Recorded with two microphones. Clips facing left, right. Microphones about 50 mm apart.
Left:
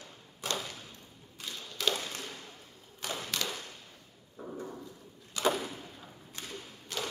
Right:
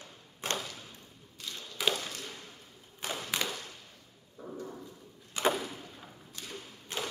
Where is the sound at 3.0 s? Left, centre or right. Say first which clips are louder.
Even; centre.